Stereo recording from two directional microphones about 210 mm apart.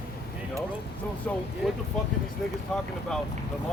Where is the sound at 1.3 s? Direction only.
5° left (ahead or behind).